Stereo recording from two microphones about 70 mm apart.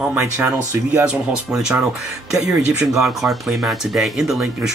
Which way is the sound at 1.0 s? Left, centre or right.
Centre.